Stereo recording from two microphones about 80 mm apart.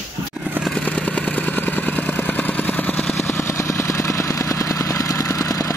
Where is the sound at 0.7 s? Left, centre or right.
Centre.